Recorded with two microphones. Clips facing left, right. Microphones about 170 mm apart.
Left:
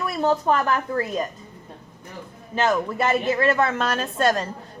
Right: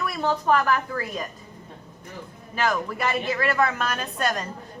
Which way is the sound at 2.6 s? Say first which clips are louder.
Left 4 dB; 25° left (ahead or behind).